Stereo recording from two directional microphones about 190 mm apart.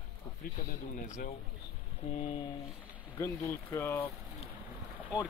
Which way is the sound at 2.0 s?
30° left (ahead or behind).